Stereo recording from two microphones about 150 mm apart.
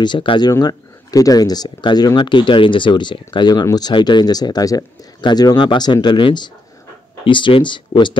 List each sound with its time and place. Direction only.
0.0 s speech: 35° left (ahead or behind)